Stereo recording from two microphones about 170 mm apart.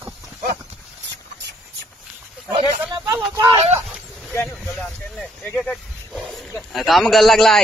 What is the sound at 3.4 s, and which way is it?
Speech, 35° right (ahead or behind).